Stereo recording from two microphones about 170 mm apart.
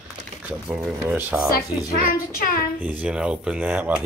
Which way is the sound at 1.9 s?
55° left (ahead or behind).